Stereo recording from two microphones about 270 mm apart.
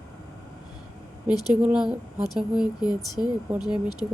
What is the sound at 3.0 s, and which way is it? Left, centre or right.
Speech, centre.